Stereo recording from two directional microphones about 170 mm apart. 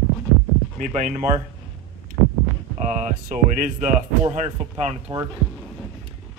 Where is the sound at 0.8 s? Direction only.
50° right (ahead or behind).